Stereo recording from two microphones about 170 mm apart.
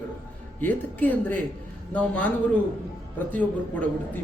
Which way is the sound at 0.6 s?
10° left (ahead or behind).